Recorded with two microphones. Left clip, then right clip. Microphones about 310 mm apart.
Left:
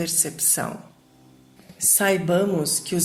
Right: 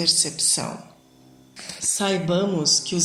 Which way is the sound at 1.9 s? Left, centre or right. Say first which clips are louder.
Left 3 dB; left.